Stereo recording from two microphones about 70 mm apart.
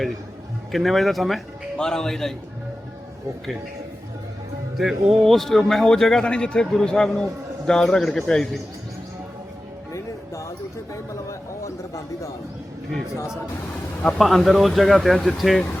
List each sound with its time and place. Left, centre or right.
0.7 s speech: centre
4.8 s speech: centre
10.9 s a sound: left
14.2 s speech: centre